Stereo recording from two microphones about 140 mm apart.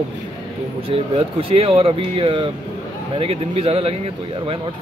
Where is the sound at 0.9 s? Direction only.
45° right (ahead or behind).